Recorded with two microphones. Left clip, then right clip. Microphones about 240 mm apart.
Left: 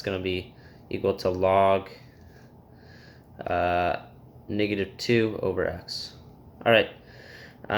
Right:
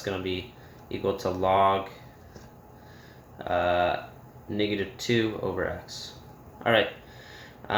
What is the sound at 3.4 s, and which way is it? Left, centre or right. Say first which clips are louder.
Speech: even; left.